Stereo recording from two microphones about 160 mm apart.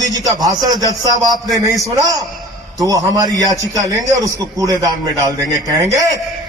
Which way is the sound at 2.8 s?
20° right (ahead or behind).